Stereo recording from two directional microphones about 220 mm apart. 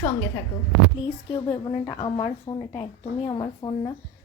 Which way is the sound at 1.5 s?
20° left (ahead or behind).